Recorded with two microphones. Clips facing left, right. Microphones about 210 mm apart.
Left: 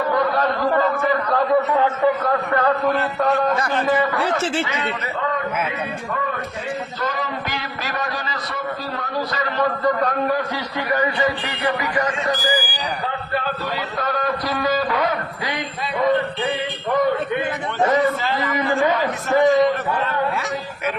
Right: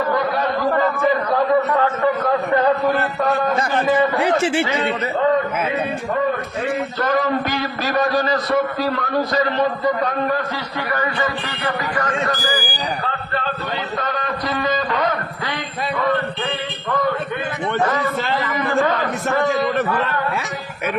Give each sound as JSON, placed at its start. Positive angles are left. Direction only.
{"t": 4.1, "sound": "speech", "side_deg": -15}
{"t": 4.6, "sound": "a man's voice", "side_deg": -30}
{"t": 7.0, "sound": "a man's voice", "side_deg": -55}
{"t": 10.9, "sound": "music", "side_deg": 15}
{"t": 14.0, "sound": "a man's voice", "side_deg": 0}